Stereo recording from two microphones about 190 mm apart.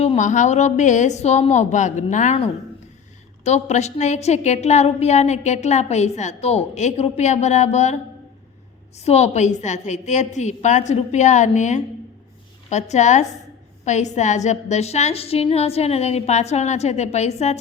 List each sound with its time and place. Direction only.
0.0 s a woman's voice: 35° left (ahead or behind)
9.0 s a woman's voice: 35° left (ahead or behind)